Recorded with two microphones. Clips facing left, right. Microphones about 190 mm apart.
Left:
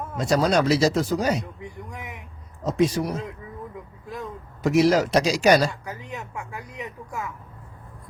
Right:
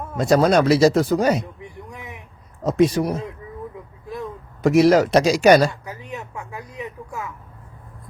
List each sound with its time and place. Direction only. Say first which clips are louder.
0.2 s speech: right 5 dB; 55° right (ahead or behind)
2.6 s speech: right 4 dB; 55° right (ahead or behind)
4.6 s speech: right 4 dB; 55° right (ahead or behind)